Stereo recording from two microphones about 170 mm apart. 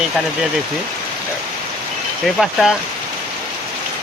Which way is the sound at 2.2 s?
Centre (ahead or behind).